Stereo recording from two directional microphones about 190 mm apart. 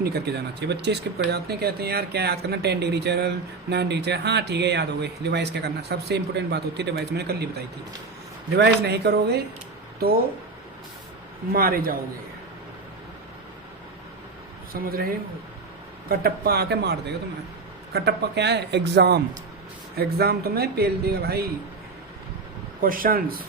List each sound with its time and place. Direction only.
0.0 s speech: 60° right (ahead or behind)
8.5 s speech: 60° right (ahead or behind)
11.5 s speech: 50° right (ahead or behind)
14.7 s speech: 50° right (ahead or behind)
16.0 s speech: 55° right (ahead or behind)
22.8 s speech: 50° right (ahead or behind)